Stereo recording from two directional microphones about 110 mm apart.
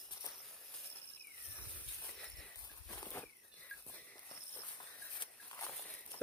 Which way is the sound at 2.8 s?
25° left (ahead or behind).